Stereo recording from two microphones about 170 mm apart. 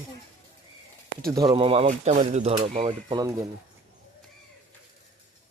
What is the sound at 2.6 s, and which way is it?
Speech, 30° right (ahead or behind).